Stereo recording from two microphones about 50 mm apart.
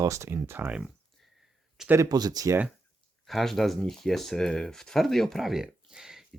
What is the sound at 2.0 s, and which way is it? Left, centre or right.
Speech, right.